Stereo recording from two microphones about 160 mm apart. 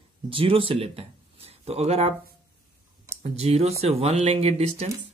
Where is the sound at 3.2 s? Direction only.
40° right (ahead or behind).